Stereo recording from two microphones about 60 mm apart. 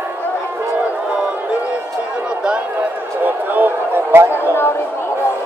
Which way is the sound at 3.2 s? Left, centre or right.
Right.